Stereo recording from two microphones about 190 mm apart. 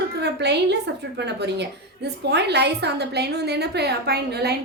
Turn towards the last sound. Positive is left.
turn(degrees=-60)  # may be behind; listen again after turning